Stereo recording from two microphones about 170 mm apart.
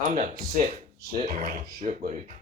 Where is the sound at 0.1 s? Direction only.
50° right (ahead or behind).